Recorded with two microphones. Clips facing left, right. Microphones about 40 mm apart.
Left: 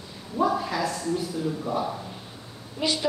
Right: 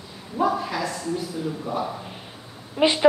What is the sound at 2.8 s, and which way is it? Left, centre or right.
Speech, right.